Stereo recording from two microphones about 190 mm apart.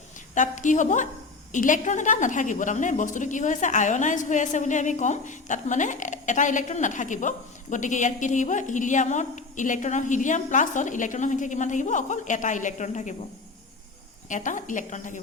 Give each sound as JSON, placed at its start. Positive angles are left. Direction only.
{"t": 0.3, "sound": "a woman's voice", "side_deg": 40}
{"t": 14.3, "sound": "a woman's voice", "side_deg": 40}